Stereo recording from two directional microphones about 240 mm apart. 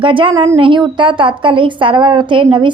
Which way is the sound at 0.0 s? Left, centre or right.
Right.